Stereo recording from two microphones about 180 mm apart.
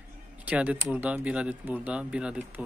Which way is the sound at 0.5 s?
5° right (ahead or behind).